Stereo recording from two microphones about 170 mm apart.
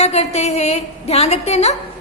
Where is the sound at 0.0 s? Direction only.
40° left (ahead or behind).